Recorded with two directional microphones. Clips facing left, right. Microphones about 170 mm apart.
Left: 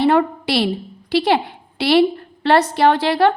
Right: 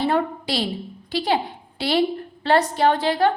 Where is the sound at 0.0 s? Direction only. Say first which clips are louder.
Left 6 dB; 70° left (ahead or behind).